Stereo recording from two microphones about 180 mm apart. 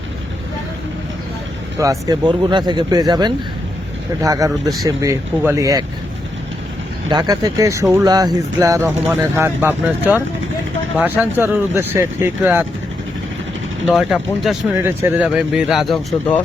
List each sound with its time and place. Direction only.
1.8 s speech: 20° right (ahead or behind)
7.1 s speech: 20° right (ahead or behind)
13.8 s speech: 5° right (ahead or behind)